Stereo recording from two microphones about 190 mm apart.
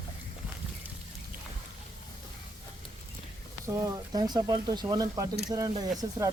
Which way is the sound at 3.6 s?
15° right (ahead or behind).